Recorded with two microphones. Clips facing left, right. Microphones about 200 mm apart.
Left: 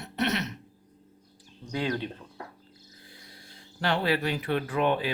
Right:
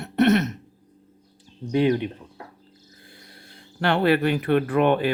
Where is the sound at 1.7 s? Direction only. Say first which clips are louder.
Right 9 dB; 20° right (ahead or behind).